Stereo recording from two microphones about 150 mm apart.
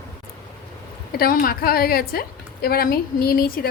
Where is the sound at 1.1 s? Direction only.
80° left.